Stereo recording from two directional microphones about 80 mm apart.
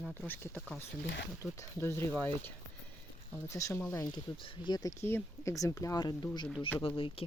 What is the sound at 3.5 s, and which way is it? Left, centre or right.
Speech, left.